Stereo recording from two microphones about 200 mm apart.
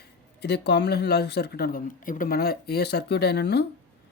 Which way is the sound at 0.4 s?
55° left (ahead or behind).